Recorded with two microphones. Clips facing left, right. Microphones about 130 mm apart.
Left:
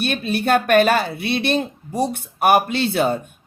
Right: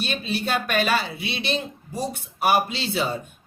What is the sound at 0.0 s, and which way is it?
Speech, 55° left (ahead or behind).